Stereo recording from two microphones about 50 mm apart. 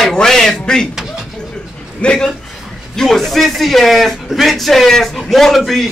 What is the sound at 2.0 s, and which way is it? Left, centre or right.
Speech, left.